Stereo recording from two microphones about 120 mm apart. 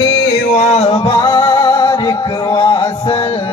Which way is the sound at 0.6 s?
60° left (ahead or behind).